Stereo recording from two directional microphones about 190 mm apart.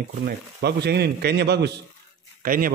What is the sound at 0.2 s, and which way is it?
A man's voice, 60° right (ahead or behind).